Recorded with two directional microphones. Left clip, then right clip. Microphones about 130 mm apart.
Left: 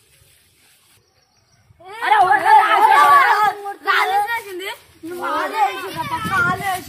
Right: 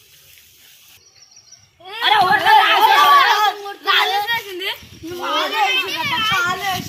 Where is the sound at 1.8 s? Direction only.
Centre (ahead or behind).